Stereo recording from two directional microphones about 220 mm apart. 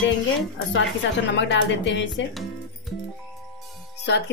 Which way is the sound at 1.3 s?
55° left (ahead or behind).